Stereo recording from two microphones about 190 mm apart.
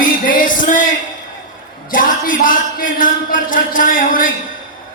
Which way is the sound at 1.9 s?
45° left (ahead or behind).